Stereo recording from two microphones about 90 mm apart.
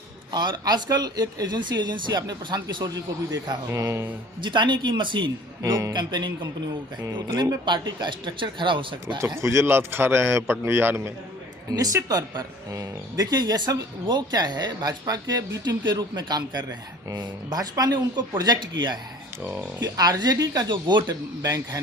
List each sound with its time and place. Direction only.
0.3 s speech: 55° right (ahead or behind)
3.7 s mantra: 35° right (ahead or behind)
4.4 s speech: 60° right (ahead or behind)
7.0 s a man's voice: 30° right (ahead or behind)
7.6 s speech: 60° right (ahead or behind)
9.1 s a man's voice: 30° right (ahead or behind)
11.7 s speech: 45° right (ahead or behind)
19.4 s speech: 15° right (ahead or behind)
20.0 s speech: 45° right (ahead or behind)
21.4 s speech: 40° right (ahead or behind)